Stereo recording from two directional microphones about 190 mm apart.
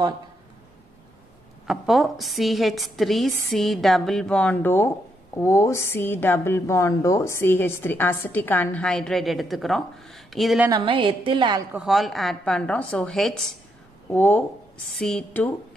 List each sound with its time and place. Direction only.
1.7 s a woman's voice: centre (ahead or behind)
10.7 s a woman's voice: 25° right (ahead or behind)
11.7 s a woman's voice: centre (ahead or behind)